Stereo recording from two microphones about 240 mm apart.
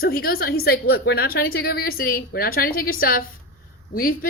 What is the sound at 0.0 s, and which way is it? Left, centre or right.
A woman's voice, left.